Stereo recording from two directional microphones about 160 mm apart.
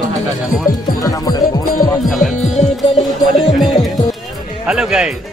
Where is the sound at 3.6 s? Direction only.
Centre (ahead or behind).